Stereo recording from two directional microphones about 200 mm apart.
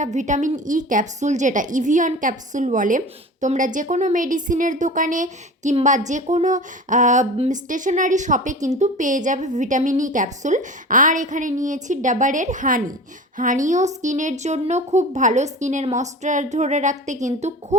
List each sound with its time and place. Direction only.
0.0 s a woman's voice: 35° right (ahead or behind)